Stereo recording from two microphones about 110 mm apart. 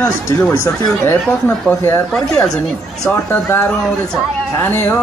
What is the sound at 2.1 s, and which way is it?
Speech, 5° left (ahead or behind).